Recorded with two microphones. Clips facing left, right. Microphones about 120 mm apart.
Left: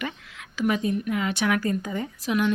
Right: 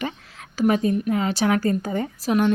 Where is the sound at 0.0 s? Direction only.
35° right (ahead or behind).